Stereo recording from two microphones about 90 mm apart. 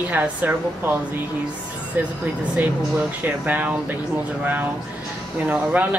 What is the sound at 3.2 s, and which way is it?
A woman's voice, 15° right (ahead or behind).